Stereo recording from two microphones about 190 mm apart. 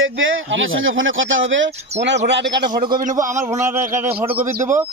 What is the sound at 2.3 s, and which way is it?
Speech, 65° right (ahead or behind).